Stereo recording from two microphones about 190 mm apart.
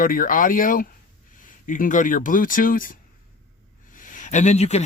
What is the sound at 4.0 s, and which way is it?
Speech, 45° left (ahead or behind).